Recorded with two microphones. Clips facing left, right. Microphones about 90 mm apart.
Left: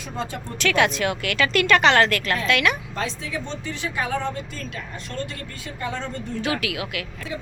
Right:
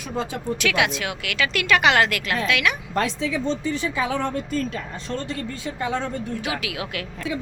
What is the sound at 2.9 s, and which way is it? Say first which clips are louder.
Speech: right 5 dB; 70° right (ahead or behind).